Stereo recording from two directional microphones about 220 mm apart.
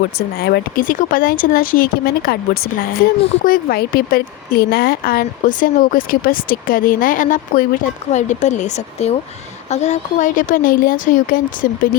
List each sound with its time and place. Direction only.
0.2 s a woman's voice: 45° left (ahead or behind)